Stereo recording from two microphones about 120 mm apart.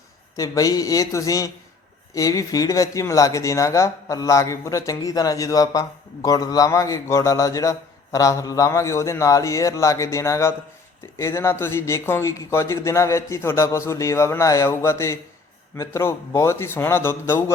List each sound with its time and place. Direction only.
0.3 s a man's voice: 30° left (ahead or behind)